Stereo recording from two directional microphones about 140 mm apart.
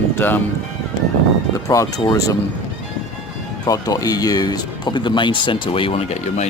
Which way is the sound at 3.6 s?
25° left (ahead or behind).